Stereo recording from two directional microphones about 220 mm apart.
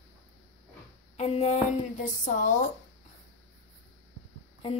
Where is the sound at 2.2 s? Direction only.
35° left (ahead or behind).